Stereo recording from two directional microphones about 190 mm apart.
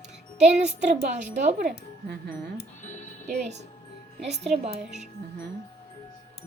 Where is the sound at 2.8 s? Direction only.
40° left (ahead or behind).